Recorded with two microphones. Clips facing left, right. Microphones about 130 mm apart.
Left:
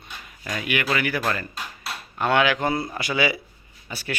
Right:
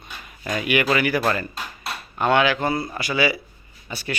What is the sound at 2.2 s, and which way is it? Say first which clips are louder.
Speech: right 2 dB; centre (ahead or behind).